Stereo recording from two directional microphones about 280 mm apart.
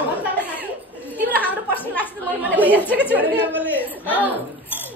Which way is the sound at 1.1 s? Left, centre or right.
Centre.